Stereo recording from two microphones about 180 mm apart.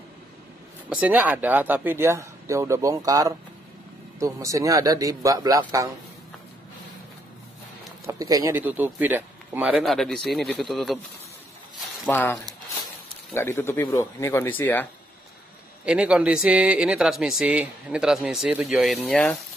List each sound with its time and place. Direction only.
1.0 s a man's voice: 10° right (ahead or behind)
8.0 s a man's voice: 20° right (ahead or behind); by 11.0 s centre (ahead or behind)
12.1 s speech: 10° left (ahead or behind)
15.8 s a man's voice: 5° right (ahead or behind)